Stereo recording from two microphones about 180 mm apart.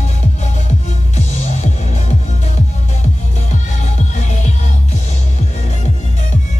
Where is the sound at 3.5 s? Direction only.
40° left (ahead or behind).